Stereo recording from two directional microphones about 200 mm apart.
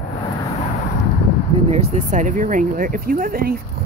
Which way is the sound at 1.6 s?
35° right (ahead or behind).